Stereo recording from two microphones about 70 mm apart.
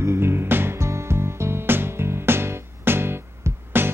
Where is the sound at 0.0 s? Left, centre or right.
Right.